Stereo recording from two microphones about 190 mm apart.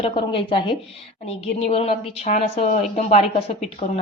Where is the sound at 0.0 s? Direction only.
30° left (ahead or behind).